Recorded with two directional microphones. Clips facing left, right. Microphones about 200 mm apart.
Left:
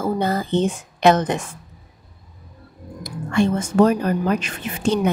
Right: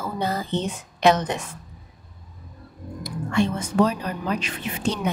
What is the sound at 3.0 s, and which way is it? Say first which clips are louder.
Speech: left 3 dB; 50° left (ahead or behind).